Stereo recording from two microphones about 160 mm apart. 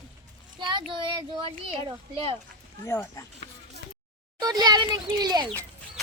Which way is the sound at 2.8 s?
15° left (ahead or behind).